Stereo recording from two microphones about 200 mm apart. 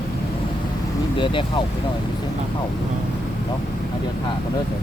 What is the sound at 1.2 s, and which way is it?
Speech, 25° left (ahead or behind).